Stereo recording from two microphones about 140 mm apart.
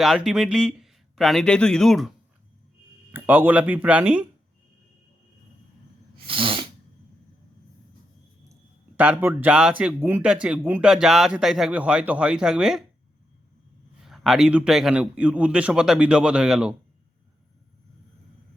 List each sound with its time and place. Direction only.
0.0 s speech: centre (ahead or behind)
3.1 s speech: 15° right (ahead or behind)
6.1 s sneeze: 40° right (ahead or behind)
9.0 s speech: 10° right (ahead or behind)
14.0 s speech: centre (ahead or behind)